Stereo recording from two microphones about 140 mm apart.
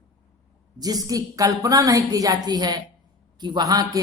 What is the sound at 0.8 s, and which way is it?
A man's voice, 25° right (ahead or behind).